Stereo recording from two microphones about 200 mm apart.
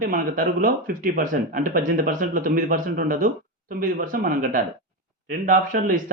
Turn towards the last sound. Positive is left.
turn(degrees=-45)  # may be behind; listen again after turning